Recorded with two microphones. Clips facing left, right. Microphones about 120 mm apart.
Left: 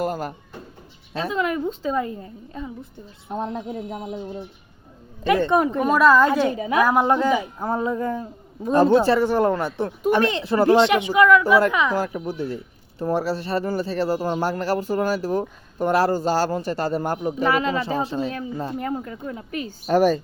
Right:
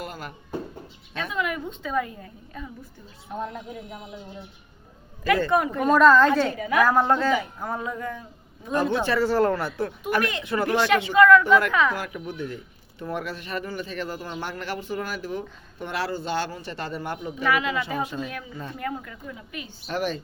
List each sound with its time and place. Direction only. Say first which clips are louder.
0.0 s speech: left 10 dB; 40° left (ahead or behind)
5.2 s speech: left 3 dB; 20° left (ahead or behind)
5.8 s a woman's voice: right 1 dB; 10° left (ahead or behind)
7.7 s speech: left 9 dB; 30° left (ahead or behind)
9.1 s a woman's voice: left 2 dB; 15° left (ahead or behind)
11.9 s speech: left 7 dB; 35° left (ahead or behind)
19.2 s a woman's voice: left 8 dB; 45° left (ahead or behind)